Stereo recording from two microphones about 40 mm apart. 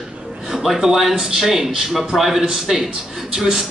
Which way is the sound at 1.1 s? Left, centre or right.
Centre.